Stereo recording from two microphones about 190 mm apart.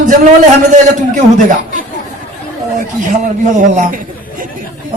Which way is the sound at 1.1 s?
45° right (ahead or behind).